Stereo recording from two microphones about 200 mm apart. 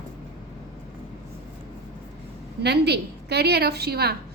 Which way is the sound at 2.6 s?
55° right (ahead or behind).